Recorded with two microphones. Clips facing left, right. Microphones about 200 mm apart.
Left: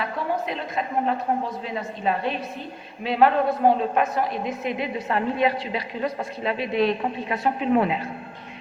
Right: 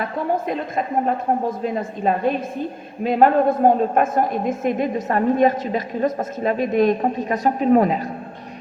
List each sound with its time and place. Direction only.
0.0 s a woman's voice: 45° right (ahead or behind)